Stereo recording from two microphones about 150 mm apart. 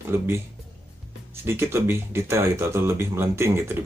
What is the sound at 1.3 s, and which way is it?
Speech, 15° right (ahead or behind).